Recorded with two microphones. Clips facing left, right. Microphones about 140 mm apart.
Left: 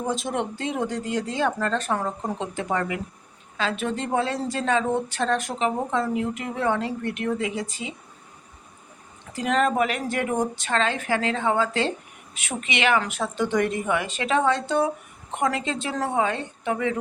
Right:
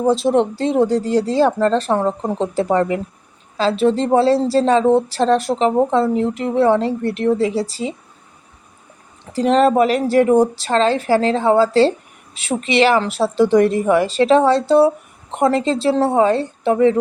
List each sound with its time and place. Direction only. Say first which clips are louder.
0.0 s a woman's voice: right 11 dB; 30° right (ahead or behind)
9.3 s a woman's voice: right 9 dB; 30° right (ahead or behind)